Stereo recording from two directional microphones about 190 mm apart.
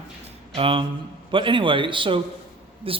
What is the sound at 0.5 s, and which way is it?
Speech, 30° right (ahead or behind).